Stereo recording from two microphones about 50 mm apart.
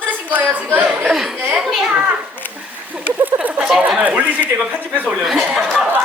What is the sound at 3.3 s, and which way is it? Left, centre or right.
Chatter, right.